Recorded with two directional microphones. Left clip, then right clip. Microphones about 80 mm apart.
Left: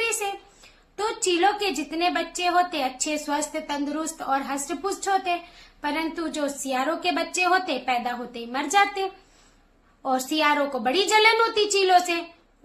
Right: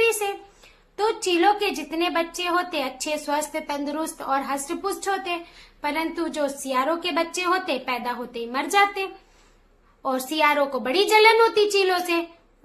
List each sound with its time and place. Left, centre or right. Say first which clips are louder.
0.0 s a woman's voice: right 5 dB; right